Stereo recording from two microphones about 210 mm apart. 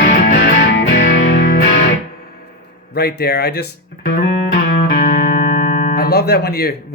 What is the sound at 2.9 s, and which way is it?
Speech, 50° left (ahead or behind).